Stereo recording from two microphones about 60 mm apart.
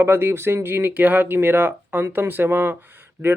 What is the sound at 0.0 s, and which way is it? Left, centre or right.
Speech, right.